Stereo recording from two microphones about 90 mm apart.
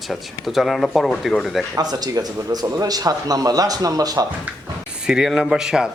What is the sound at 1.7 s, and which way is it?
Speech, 45° right (ahead or behind).